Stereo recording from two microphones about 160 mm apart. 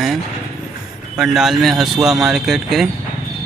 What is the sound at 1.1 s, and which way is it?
Speech, centre (ahead or behind).